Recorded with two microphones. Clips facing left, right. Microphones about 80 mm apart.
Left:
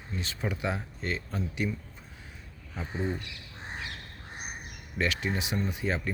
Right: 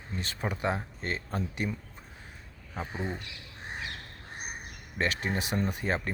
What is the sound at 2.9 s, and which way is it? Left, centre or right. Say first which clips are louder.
Speech: left 4 dB; centre.